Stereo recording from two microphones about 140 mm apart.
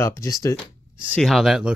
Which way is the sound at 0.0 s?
20° left (ahead or behind).